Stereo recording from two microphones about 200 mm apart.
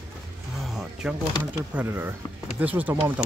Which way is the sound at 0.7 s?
Centre (ahead or behind).